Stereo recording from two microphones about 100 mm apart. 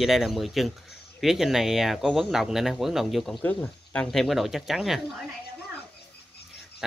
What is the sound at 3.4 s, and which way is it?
Speech, 15° left (ahead or behind).